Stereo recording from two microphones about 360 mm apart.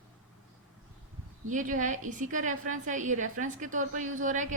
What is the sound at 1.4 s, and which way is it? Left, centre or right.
A woman's voice, right.